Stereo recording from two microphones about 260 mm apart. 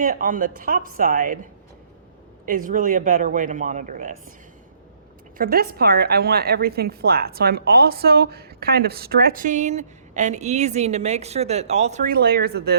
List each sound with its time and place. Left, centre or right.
0.0 s a woman's voice: right
2.5 s speech: right
5.4 s a woman's voice: right